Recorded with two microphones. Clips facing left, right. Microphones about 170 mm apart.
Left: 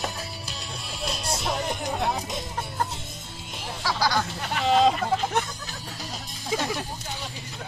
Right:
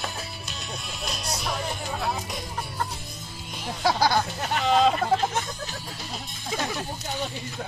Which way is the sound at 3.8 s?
50° right (ahead or behind).